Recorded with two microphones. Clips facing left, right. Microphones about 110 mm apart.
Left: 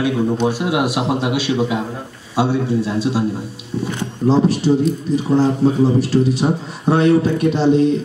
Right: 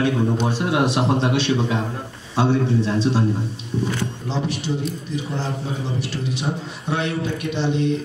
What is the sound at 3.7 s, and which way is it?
Speech, 15° right (ahead or behind).